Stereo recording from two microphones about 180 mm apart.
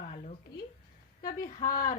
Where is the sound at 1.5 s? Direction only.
50° left (ahead or behind).